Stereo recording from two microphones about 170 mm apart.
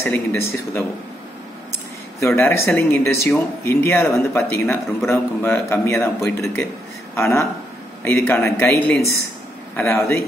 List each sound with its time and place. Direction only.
0.0 s speech: 15° left (ahead or behind)
2.2 s speech: 15° left (ahead or behind)